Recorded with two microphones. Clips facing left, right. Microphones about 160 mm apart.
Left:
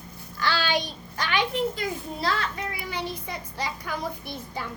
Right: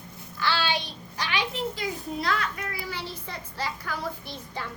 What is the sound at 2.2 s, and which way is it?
A child's voice, 30° left (ahead or behind).